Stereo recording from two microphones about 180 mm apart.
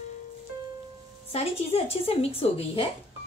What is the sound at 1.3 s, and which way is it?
Speech, 35° left (ahead or behind).